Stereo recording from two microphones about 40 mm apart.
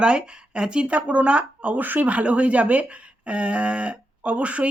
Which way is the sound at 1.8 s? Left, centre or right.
Right.